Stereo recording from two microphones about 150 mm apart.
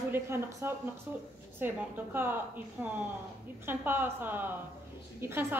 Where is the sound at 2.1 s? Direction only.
15° right (ahead or behind).